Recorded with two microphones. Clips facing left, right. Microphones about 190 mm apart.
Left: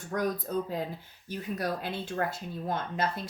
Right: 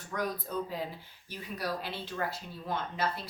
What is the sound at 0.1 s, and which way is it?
Speech, 45° left (ahead or behind).